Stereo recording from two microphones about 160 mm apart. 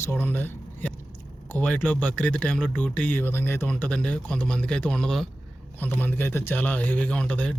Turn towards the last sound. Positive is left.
turn(degrees=5)  # may be behind; listen again after turning